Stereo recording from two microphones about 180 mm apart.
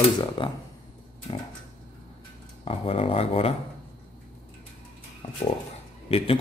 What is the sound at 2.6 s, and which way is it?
Speech, 35° left (ahead or behind).